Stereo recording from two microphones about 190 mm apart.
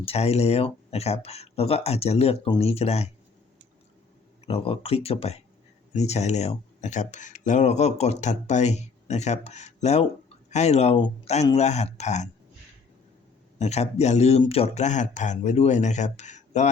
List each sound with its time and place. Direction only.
0.0 s speech: 35° left (ahead or behind)
4.4 s speech: 30° left (ahead or behind)
13.6 s speech: 35° left (ahead or behind)